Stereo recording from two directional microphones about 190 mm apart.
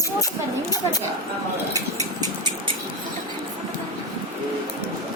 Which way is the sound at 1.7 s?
20° right (ahead or behind).